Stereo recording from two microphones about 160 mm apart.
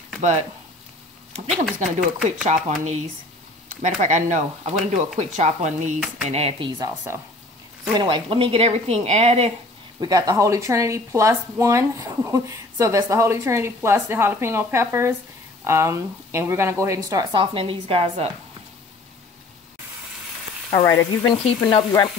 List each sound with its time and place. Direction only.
0.2 s speech: 45° right (ahead or behind)
1.7 s speech: centre (ahead or behind)
2.4 s speech: 45° right (ahead or behind)
7.9 s speech: 30° right (ahead or behind)
9.9 s speech: 25° right (ahead or behind); by 18.3 s 40° right (ahead or behind)
20.8 s frying: 20° left (ahead or behind)